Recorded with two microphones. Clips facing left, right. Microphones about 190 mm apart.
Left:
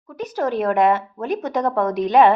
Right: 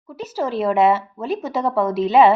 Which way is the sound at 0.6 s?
5° right (ahead or behind).